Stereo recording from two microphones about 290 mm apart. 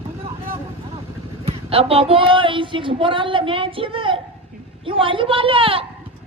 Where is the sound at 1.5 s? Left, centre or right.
Centre.